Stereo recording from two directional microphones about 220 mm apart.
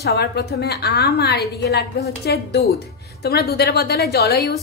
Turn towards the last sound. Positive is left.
turn(degrees=45)  # may be behind; listen again after turning